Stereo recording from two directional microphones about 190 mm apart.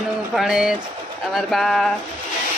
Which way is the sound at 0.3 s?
Centre (ahead or behind).